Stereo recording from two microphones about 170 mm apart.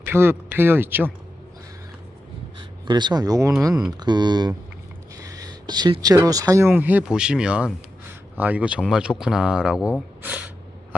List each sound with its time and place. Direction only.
0.0 s speech: 15° right (ahead or behind)
2.6 s speech: 25° right (ahead or behind); by 9.7 s 5° right (ahead or behind)
10.2 s a sound: 10° right (ahead or behind)